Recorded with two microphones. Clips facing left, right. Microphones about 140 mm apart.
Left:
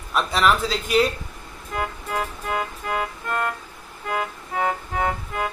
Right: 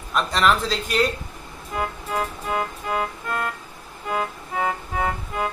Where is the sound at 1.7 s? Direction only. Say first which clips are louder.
Right 1 dB; 25° right (ahead or behind).